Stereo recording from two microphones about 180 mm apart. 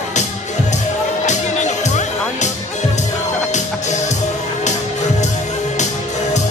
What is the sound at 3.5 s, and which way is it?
Music, 40° left (ahead or behind).